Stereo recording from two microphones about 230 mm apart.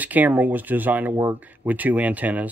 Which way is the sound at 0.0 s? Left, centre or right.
Centre.